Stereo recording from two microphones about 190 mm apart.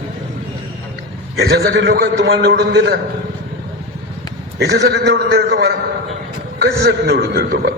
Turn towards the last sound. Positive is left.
turn(degrees=-55)  # may be behind; listen again after turning